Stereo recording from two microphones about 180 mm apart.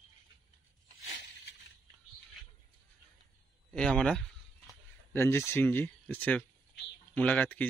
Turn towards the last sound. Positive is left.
turn(degrees=10)  # may be behind; listen again after turning